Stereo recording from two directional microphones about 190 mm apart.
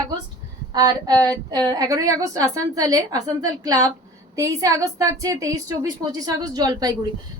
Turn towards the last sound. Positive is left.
turn(degrees=-20)  # may be behind; listen again after turning